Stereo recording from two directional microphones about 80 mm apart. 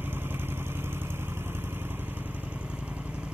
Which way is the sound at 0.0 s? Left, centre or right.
Right.